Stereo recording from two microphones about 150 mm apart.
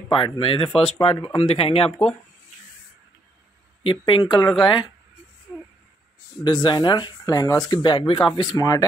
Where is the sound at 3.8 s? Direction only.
35° left (ahead or behind).